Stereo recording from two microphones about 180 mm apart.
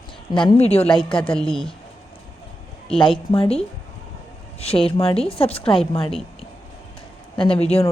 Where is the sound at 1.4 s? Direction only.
5° left (ahead or behind).